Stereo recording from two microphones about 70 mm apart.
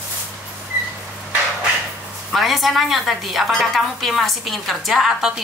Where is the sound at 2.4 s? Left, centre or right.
Centre.